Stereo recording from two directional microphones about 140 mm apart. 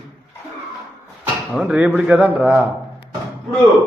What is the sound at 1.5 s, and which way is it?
Speech, 5° right (ahead or behind).